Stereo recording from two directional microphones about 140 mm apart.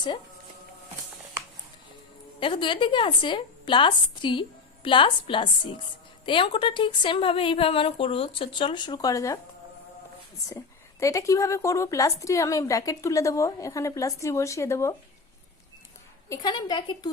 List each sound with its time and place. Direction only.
2.4 s a woman's voice: 35° left (ahead or behind)
11.0 s a woman's voice: 25° left (ahead or behind)
16.3 s a woman's voice: 30° left (ahead or behind)